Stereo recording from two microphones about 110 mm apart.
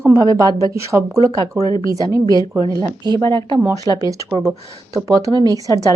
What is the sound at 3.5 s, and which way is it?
Speech, 30° right (ahead or behind).